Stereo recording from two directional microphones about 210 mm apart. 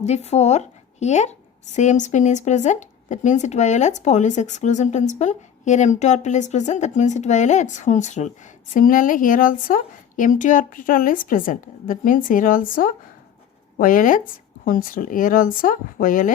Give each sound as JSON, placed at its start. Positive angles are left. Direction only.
{"t": 0.0, "sound": "a woman's voice", "side_deg": 30}